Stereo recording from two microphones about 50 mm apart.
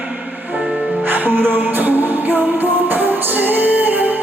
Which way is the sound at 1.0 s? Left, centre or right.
Right.